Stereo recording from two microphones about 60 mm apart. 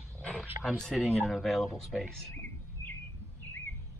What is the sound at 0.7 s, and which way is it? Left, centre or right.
Speech, centre.